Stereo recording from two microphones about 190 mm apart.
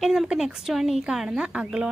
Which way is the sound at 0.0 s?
Centre (ahead or behind).